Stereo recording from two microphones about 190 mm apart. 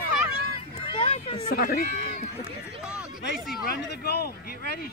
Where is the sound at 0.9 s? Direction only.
30° left (ahead or behind).